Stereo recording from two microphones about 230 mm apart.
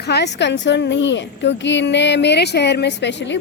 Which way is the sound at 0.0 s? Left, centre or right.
Left.